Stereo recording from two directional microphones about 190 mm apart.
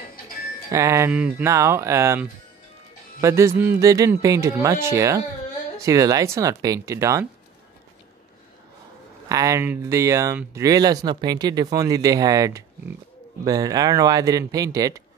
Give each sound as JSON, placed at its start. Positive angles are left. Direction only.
{"t": 0.7, "sound": "speech", "side_deg": -15}
{"t": 9.3, "sound": "a man's voice", "side_deg": -15}